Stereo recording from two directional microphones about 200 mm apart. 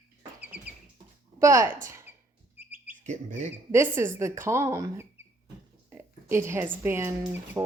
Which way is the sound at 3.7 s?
10° right (ahead or behind).